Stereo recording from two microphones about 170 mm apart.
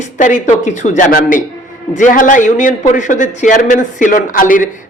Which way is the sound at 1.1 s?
55° left (ahead or behind).